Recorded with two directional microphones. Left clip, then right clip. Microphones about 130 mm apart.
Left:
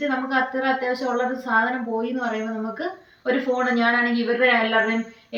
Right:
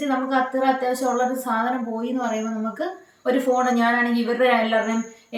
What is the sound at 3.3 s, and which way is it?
A woman's voice, 15° right (ahead or behind).